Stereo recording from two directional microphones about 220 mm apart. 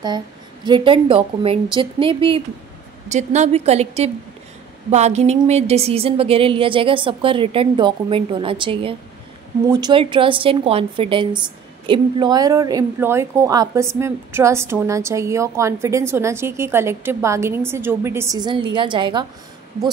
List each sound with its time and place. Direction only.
0.7 s speech: 20° right (ahead or behind)
4.9 s a woman's voice: 30° right (ahead or behind)